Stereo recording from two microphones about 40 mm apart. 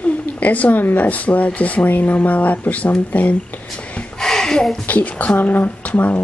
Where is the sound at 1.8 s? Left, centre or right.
Left.